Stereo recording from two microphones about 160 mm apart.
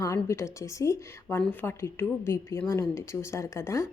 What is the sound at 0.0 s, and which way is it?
A woman's voice, 20° left (ahead or behind).